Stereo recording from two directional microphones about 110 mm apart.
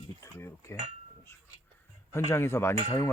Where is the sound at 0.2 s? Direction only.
25° left (ahead or behind).